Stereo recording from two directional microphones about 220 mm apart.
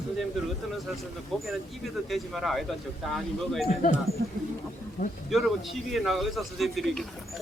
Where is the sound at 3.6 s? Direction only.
30° left (ahead or behind).